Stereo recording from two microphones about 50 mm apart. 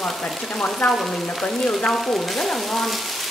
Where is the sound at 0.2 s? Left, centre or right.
Left.